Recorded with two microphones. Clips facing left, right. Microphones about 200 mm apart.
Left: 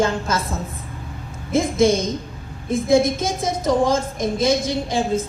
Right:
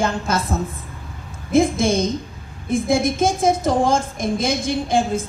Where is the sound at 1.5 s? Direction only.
55° right (ahead or behind).